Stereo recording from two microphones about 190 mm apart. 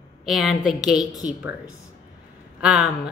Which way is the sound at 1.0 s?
20° left (ahead or behind).